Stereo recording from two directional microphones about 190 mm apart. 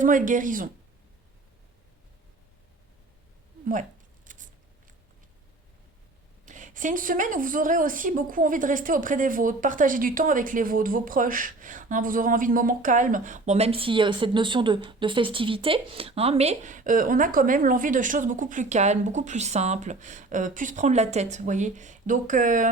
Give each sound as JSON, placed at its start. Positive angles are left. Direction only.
{"t": 0.0, "sound": "a woman's voice", "side_deg": -45}
{"t": 4.3, "sound": "a sound", "side_deg": -45}
{"t": 6.4, "sound": "a woman's voice", "side_deg": -40}